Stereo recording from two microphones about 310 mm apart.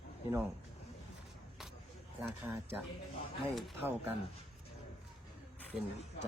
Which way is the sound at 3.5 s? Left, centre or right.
Centre.